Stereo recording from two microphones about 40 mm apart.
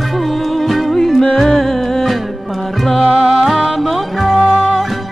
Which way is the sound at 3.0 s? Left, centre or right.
Right.